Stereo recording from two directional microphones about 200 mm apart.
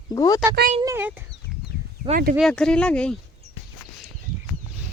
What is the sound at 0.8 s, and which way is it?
Speech, 10° right (ahead or behind).